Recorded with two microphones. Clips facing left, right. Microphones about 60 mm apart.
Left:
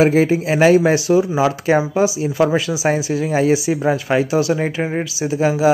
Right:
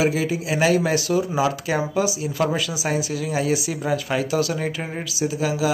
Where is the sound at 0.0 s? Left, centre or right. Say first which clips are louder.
Left 8 dB; left.